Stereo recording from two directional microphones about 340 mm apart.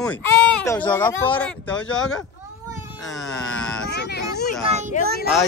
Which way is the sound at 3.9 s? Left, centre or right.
Left.